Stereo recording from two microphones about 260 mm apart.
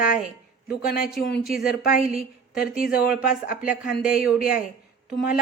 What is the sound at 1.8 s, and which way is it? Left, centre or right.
Speech, left.